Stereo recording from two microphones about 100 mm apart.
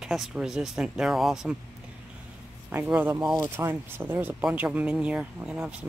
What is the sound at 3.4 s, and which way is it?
Speech, 25° right (ahead or behind).